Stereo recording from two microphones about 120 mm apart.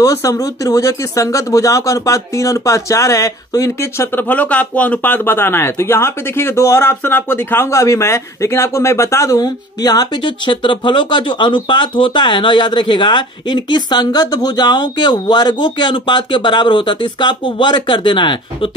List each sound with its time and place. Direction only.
0.0 s speech: 30° left (ahead or behind)
4.3 s speech: 15° left (ahead or behind); by 18.7 s 40° left (ahead or behind)